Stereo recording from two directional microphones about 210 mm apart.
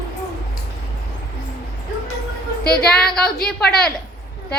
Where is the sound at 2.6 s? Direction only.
50° left (ahead or behind).